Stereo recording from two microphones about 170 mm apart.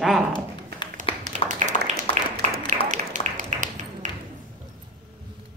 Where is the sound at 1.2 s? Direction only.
45° right (ahead or behind).